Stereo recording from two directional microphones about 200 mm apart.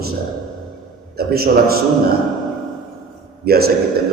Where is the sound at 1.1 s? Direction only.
50° right (ahead or behind).